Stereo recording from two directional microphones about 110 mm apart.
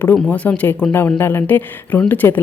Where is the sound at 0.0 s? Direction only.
15° left (ahead or behind).